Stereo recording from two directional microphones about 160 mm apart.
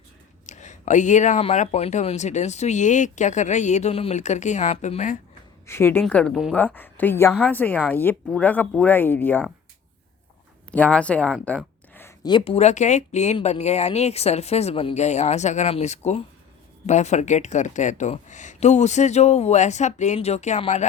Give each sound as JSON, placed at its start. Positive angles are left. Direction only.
{"t": 0.4, "sound": "speech", "side_deg": 50}
{"t": 5.6, "sound": "speech", "side_deg": 15}
{"t": 6.7, "sound": "speech", "side_deg": 10}
{"t": 10.7, "sound": "speech", "side_deg": 5}
{"t": 12.2, "sound": "speech", "side_deg": 30}
{"t": 12.5, "sound": "speech", "side_deg": 45}